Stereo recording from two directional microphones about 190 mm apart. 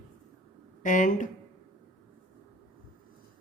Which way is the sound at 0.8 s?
40° left (ahead or behind).